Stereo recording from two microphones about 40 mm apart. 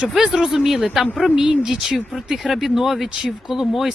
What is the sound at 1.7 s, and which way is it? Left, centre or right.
Speech, centre.